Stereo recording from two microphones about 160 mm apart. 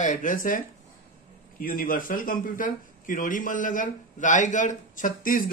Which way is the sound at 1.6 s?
60° left (ahead or behind).